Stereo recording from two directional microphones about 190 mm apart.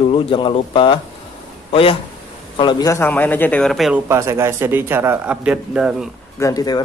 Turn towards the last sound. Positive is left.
turn(degrees=20)  # may be behind; listen again after turning